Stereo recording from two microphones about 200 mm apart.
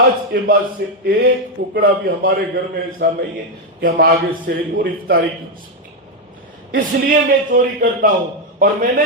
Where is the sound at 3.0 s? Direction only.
50° right (ahead or behind).